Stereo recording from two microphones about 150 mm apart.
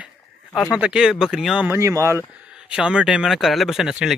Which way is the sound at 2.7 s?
5° right (ahead or behind).